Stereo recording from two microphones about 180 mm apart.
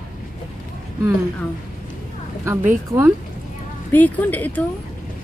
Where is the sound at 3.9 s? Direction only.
10° left (ahead or behind).